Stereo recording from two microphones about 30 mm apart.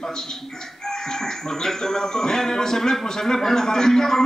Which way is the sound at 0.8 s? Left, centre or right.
Centre.